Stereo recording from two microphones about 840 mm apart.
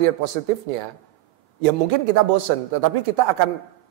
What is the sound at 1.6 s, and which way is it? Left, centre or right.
A man's voice, right.